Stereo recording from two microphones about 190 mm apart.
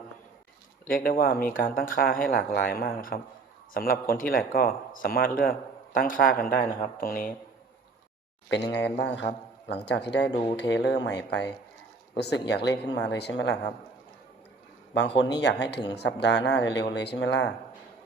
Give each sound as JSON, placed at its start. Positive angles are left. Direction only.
{"t": 0.9, "sound": "speech", "side_deg": 50}
{"t": 8.4, "sound": "speech", "side_deg": 65}
{"t": 14.9, "sound": "speech", "side_deg": 65}